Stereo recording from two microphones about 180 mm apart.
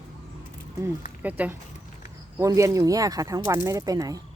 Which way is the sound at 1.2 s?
10° right (ahead or behind).